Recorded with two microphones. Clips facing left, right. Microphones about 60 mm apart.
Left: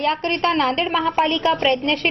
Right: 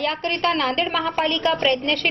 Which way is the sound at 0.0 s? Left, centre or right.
Left.